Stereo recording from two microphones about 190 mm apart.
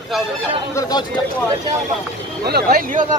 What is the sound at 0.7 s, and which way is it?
Speech, 20° left (ahead or behind).